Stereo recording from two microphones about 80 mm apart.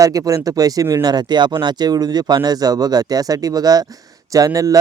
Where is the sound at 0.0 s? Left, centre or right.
Right.